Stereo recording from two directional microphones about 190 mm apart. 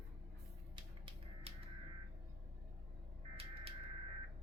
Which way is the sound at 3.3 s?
30° right (ahead or behind).